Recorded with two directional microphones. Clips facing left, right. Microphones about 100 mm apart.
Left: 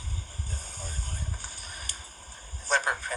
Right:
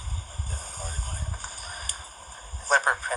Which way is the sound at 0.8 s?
45° right (ahead or behind).